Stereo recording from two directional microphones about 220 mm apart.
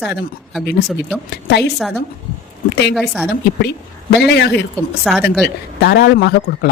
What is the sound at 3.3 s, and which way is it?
Speech, 50° left (ahead or behind).